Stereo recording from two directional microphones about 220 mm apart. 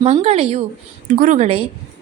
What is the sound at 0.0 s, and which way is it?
A woman's voice, 30° right (ahead or behind).